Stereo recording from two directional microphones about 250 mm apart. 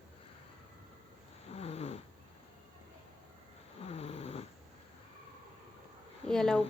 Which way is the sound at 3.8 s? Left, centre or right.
Left.